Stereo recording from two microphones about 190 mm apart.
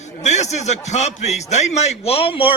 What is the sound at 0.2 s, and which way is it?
A man's voice, 35° left (ahead or behind).